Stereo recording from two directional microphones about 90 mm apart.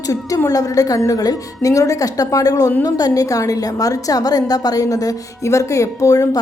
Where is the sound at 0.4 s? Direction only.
40° left (ahead or behind).